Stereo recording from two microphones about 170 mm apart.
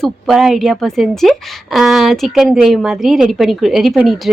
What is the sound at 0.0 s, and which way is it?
A woman's voice, centre (ahead or behind).